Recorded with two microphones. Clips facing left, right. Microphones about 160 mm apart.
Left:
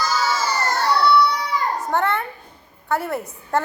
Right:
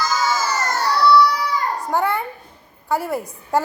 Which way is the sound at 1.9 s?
10° right (ahead or behind).